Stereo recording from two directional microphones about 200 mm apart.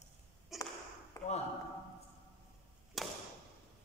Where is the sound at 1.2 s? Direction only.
15° left (ahead or behind).